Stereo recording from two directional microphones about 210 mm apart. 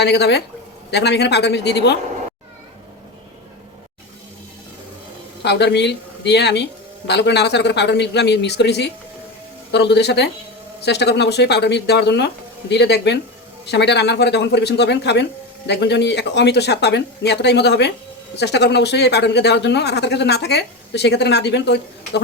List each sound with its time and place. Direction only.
0.0 s speech: 55° left (ahead or behind)
5.4 s speech: 55° left (ahead or behind)